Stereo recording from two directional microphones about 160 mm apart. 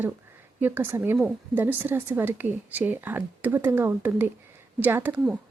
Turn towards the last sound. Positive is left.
turn(degrees=-10)  # may be behind; listen again after turning